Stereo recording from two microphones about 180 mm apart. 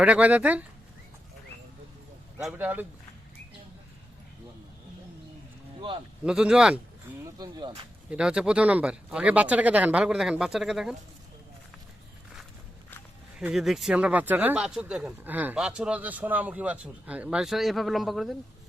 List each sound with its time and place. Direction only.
0.0 s speech: 5° right (ahead or behind)
2.4 s speech: 10° right (ahead or behind)
6.2 s speech: 5° right (ahead or behind)
7.3 s speech: 20° right (ahead or behind)
8.1 s speech: 5° right (ahead or behind)
13.4 s speech: centre (ahead or behind)